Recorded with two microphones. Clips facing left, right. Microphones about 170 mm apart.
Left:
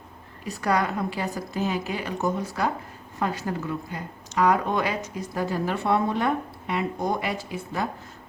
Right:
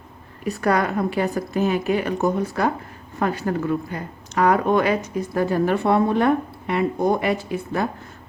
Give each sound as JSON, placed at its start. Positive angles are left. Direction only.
{"t": 0.4, "sound": "a woman's voice", "side_deg": -55}